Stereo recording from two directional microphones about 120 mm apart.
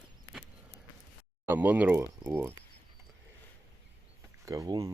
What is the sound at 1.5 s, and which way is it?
Speech, 15° right (ahead or behind).